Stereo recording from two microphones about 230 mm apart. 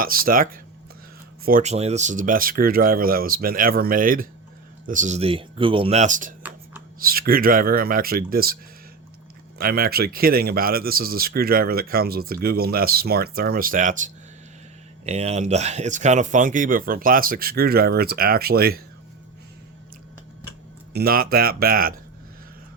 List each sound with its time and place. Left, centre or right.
0.0 s speech: right
9.6 s speech: right
20.9 s speech: right